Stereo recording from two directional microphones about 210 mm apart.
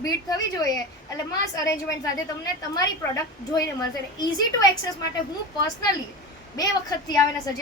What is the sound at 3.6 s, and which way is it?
A woman's voice, 20° left (ahead or behind).